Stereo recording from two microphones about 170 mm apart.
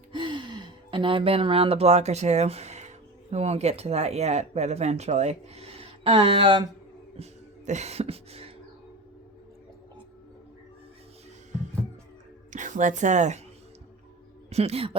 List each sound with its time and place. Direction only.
0.1 s speech: 30° right (ahead or behind)
7.2 s a sound: 45° right (ahead or behind)
12.5 s speech: 45° right (ahead or behind)
14.5 s speech: 35° right (ahead or behind)